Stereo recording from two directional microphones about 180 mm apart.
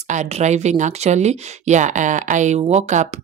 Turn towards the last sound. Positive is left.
turn(degrees=-40)  # may be behind; listen again after turning